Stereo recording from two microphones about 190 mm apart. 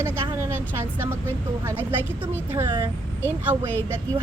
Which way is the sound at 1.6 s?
10° right (ahead or behind).